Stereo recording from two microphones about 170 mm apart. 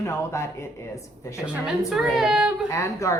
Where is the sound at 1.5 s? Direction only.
Centre (ahead or behind).